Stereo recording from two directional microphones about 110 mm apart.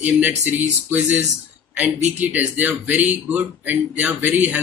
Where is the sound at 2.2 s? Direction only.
15° right (ahead or behind).